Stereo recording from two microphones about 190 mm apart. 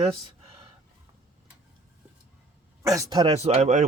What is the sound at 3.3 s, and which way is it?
Speech, 35° right (ahead or behind).